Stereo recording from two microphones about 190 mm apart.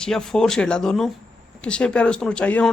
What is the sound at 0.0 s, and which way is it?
Speech, 5° left (ahead or behind).